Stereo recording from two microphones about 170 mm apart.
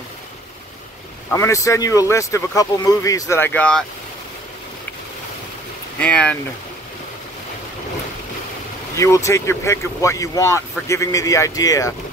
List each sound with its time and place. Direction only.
1.3 s speech: 15° left (ahead or behind)
5.9 s speech: 5° left (ahead or behind)
8.9 s speech: 20° left (ahead or behind)